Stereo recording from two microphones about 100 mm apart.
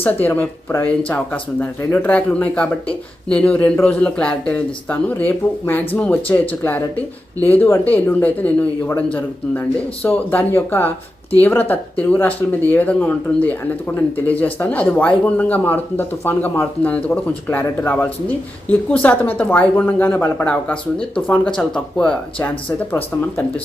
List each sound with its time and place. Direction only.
0.0 s speech: 15° left (ahead or behind)